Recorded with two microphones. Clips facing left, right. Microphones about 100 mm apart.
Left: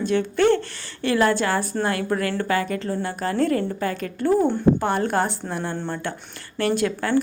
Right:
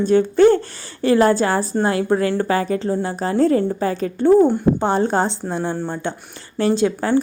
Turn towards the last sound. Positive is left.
turn(degrees=-25)  # may be behind; listen again after turning